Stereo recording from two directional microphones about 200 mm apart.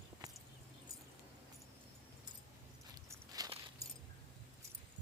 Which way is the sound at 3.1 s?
20° right (ahead or behind).